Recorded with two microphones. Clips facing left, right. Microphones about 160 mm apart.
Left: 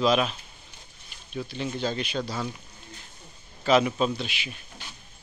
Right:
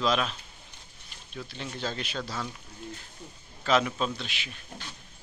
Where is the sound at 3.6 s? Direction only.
5° left (ahead or behind).